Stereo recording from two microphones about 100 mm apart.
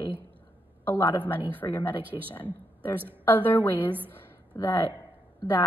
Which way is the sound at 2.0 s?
20° right (ahead or behind).